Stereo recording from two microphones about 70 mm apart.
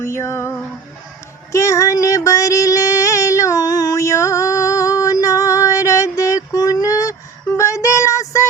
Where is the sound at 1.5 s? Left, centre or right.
Left.